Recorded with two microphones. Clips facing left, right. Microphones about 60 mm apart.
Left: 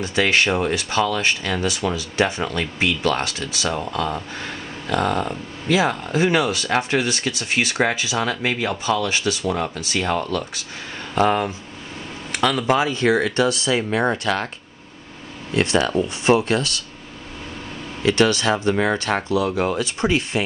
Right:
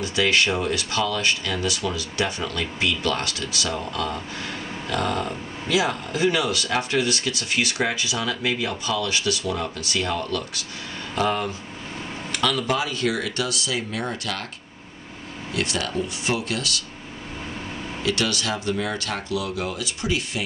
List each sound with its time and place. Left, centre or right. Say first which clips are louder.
0.6 s speech: left 4 dB; left
3.7 s speech: left 3 dB; centre
6.1 s speech: left 3 dB; left
15.5 s speech: left 7 dB; left
18.0 s speech: left 8 dB; left